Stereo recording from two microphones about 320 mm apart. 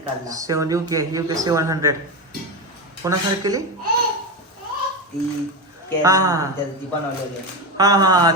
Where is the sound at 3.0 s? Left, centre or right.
Centre.